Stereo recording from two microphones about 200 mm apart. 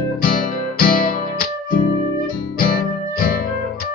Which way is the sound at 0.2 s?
45° left (ahead or behind).